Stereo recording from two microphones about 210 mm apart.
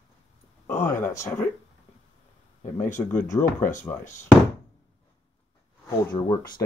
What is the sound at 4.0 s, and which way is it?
Speech, 35° left (ahead or behind).